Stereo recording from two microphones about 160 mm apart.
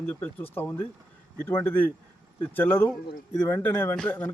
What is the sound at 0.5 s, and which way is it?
Speech, 15° left (ahead or behind).